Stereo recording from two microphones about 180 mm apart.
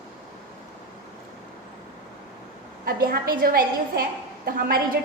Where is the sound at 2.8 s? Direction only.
55° right (ahead or behind).